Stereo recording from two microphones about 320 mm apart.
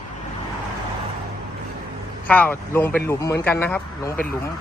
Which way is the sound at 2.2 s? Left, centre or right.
Centre.